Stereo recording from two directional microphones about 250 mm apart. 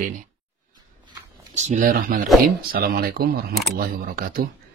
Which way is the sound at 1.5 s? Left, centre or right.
Right.